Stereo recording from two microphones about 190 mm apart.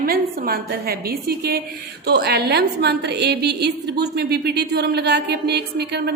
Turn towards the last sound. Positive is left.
turn(degrees=-60)  # may be behind; listen again after turning